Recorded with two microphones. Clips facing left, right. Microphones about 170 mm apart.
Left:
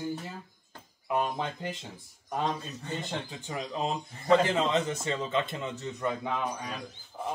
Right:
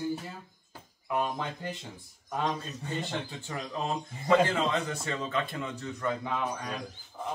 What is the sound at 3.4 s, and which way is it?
A man's voice, 15° left (ahead or behind).